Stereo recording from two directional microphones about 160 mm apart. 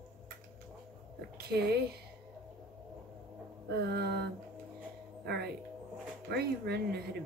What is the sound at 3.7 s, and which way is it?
Speech, 90° right.